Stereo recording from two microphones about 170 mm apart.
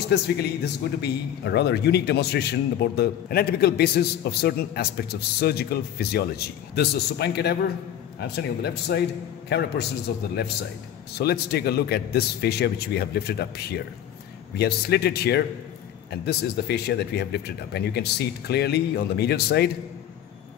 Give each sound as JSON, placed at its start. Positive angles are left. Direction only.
{"t": 1.0, "sound": "a man's voice", "side_deg": 80}